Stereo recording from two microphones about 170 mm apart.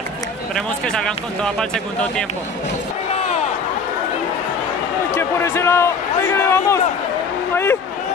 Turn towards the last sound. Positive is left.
turn(degrees=15)  # may be behind; listen again after turning